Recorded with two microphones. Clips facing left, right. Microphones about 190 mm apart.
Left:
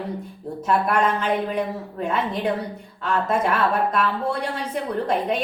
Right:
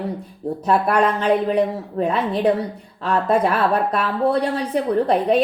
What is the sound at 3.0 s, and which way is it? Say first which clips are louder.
A woman's voice: right 4 dB; 35° right (ahead or behind).